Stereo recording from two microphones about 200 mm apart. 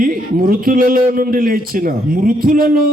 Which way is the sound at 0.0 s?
45° right (ahead or behind).